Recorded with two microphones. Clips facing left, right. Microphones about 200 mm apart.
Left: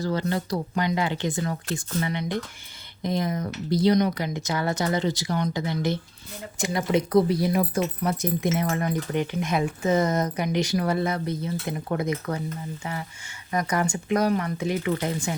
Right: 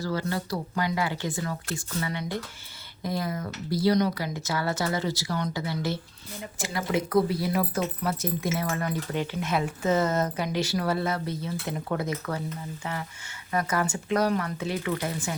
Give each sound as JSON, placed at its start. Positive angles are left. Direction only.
{"t": 0.0, "sound": "speech", "side_deg": 20}
{"t": 13.5, "sound": "speech", "side_deg": 15}